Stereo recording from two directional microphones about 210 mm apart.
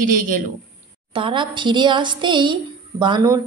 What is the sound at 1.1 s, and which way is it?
A woman's voice, 25° right (ahead or behind).